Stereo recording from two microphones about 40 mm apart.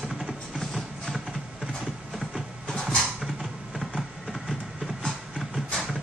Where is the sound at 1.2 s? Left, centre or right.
Centre.